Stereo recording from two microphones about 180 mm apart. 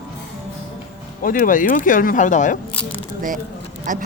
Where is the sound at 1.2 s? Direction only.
50° left (ahead or behind).